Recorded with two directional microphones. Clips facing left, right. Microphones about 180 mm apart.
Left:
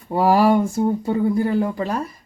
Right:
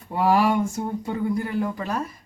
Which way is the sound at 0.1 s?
35° left (ahead or behind).